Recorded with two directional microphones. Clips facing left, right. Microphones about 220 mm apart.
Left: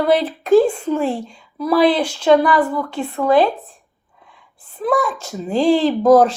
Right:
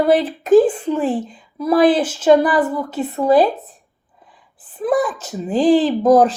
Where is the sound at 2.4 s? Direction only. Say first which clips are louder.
Even; 20° right (ahead or behind).